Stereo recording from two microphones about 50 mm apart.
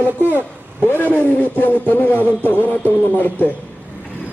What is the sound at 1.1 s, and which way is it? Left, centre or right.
Speech, left.